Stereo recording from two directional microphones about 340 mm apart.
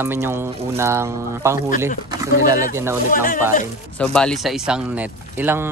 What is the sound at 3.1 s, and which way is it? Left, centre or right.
Speech, left.